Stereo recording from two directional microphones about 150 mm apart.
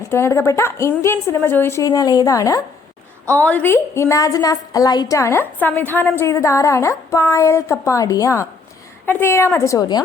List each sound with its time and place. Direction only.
0.1 s a woman's voice: 15° left (ahead or behind)
3.3 s a woman's voice: 10° left (ahead or behind)